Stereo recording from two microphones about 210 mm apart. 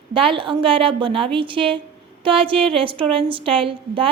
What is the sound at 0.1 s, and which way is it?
A woman's voice, 25° right (ahead or behind).